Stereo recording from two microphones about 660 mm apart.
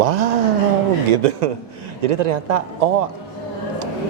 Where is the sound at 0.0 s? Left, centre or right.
Right.